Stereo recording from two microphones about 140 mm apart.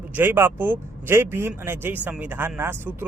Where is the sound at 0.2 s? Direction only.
15° right (ahead or behind).